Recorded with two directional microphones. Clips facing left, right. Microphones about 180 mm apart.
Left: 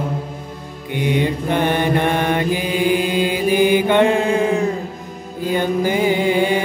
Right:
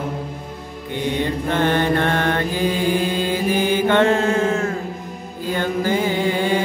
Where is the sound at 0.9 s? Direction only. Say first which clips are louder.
Left 3 dB; 15° left (ahead or behind).